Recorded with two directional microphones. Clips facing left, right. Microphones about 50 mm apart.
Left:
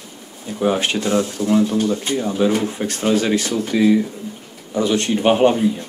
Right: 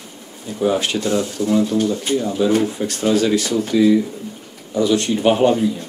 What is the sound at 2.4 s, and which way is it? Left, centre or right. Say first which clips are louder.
Speech: right 1 dB; left.